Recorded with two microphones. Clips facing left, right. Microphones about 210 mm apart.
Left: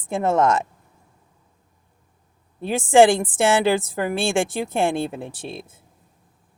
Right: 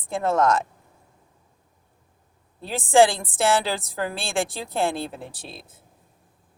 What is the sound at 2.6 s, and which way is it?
A woman's voice, 20° left (ahead or behind).